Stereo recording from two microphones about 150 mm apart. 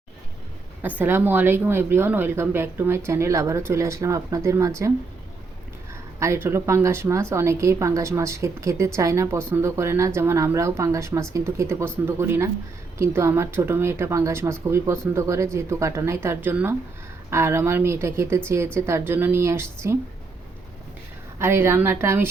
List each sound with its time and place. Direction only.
0.8 s speech: 10° right (ahead or behind)
5.9 s speech: 20° right (ahead or behind)
21.3 s speech: 15° right (ahead or behind)